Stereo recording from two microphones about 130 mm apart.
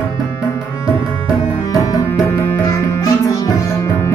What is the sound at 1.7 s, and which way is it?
Music, 25° left (ahead or behind).